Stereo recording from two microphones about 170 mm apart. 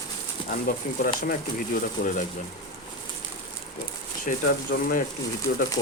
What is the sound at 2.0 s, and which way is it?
Speech, 70° left (ahead or behind).